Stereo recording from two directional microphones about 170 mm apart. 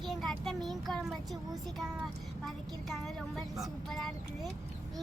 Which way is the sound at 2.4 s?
Centre (ahead or behind).